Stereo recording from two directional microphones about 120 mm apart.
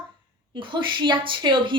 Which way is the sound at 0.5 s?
40° right (ahead or behind).